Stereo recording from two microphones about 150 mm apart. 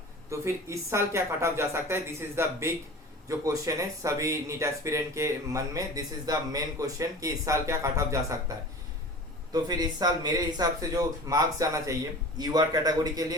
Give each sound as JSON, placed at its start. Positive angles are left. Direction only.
{"t": 0.3, "sound": "speech", "side_deg": -20}